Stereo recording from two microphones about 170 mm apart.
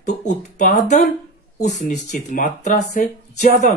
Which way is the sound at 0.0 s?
45° left (ahead or behind).